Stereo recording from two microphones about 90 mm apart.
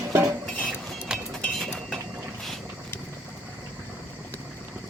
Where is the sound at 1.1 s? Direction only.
10° right (ahead or behind).